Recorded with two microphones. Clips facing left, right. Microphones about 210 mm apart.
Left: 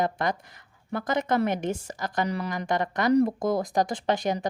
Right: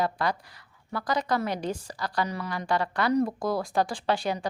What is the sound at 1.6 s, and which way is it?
Speech, 25° left (ahead or behind).